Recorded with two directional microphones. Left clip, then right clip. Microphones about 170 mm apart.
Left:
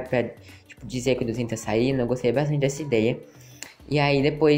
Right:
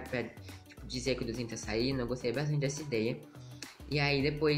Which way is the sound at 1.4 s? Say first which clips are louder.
Left 10 dB; 30° left (ahead or behind).